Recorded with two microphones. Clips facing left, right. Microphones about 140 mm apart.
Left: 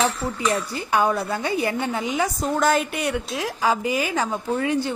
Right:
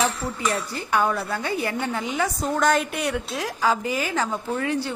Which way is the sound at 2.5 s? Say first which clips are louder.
Left 1 dB; 5° left (ahead or behind).